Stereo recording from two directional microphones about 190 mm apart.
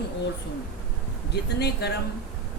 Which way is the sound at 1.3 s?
60° left (ahead or behind).